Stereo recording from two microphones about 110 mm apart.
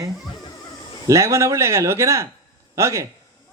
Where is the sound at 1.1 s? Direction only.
25° right (ahead or behind).